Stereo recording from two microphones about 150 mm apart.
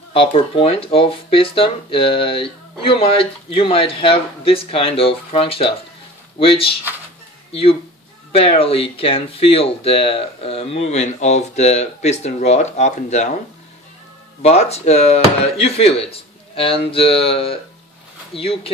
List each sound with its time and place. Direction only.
0.1 s speech: 35° left (ahead or behind)
8.3 s speech: 40° left (ahead or behind)
14.4 s speech: 45° left (ahead or behind)